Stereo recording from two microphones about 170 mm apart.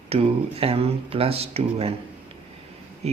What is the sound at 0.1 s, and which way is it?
Speech, 35° right (ahead or behind).